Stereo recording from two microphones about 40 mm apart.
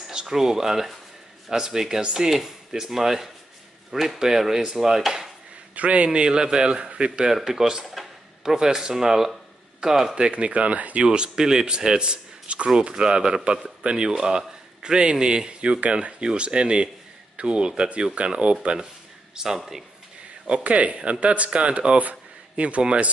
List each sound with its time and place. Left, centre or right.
0.1 s speech: centre
5.8 s speech: right
6.0 s speech: right
7.4 s speech: centre
7.9 s drawer open or close: centre
8.5 s speech: centre
10.1 s speech: right
11.1 s speech: centre
19.3 s speech: centre
20.4 s speech: right